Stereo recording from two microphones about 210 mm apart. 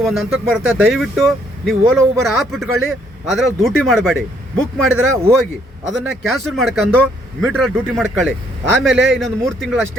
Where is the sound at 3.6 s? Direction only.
Centre (ahead or behind).